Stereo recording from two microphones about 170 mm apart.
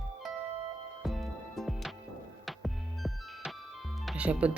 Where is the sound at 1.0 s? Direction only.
Centre (ahead or behind).